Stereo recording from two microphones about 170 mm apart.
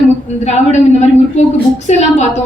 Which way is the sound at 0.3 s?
40° left (ahead or behind).